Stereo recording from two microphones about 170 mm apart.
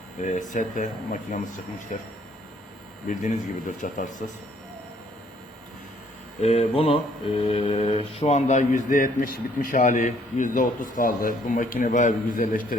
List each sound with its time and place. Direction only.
0.2 s mantra: 45° left (ahead or behind)
3.1 s mantra: 50° left (ahead or behind)
6.4 s mantra: 35° left (ahead or behind)